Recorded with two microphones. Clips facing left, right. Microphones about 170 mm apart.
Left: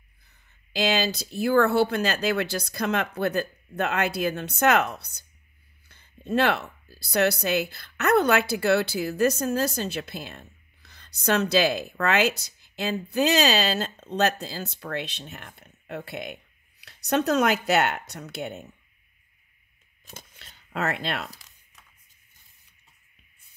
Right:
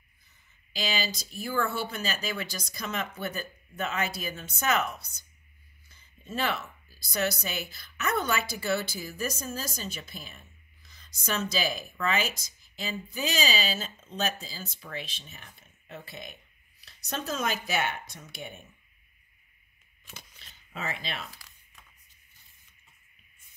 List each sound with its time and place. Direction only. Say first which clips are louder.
0.7 s a woman's voice: left 8 dB; 65° left (ahead or behind)
20.3 s speech: left 10 dB; 65° left (ahead or behind)